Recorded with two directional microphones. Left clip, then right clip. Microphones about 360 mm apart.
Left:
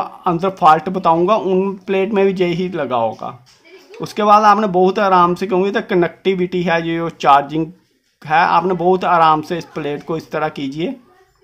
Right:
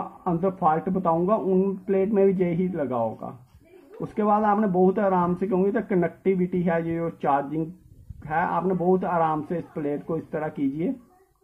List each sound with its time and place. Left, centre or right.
0.2 s speech: left